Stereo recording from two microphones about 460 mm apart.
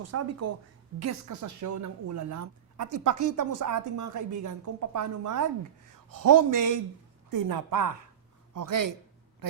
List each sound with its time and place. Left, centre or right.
0.0 s a woman's voice: right